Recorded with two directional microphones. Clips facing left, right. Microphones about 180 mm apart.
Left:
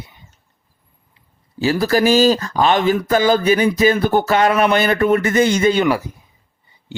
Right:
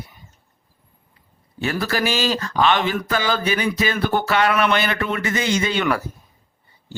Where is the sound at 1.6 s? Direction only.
30° left (ahead or behind).